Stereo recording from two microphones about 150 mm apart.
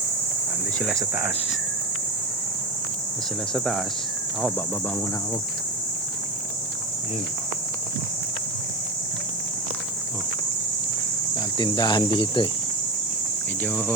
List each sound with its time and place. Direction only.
0.9 s speech: 15° right (ahead or behind)
3.5 s cricket: centre (ahead or behind)
11.3 s speech: 30° left (ahead or behind)
13.7 s speech: 10° left (ahead or behind)